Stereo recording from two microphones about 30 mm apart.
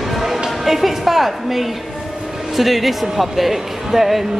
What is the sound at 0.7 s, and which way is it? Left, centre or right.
A woman's voice, centre.